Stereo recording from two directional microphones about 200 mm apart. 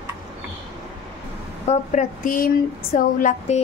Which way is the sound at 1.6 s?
40° left (ahead or behind).